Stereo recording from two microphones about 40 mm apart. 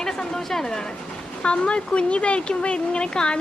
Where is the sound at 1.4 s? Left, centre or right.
Left.